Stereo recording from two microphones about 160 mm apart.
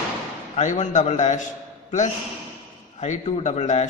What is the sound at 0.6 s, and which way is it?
A man's voice, 45° left (ahead or behind).